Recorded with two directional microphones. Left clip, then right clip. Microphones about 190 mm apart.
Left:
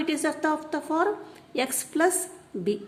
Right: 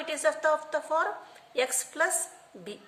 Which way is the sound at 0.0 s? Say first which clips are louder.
Even; 20° left (ahead or behind).